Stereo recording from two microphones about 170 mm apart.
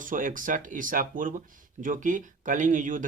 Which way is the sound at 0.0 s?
50° right (ahead or behind).